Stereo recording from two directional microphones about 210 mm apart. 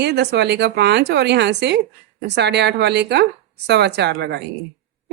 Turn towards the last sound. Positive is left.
turn(degrees=-55)  # may be behind; listen again after turning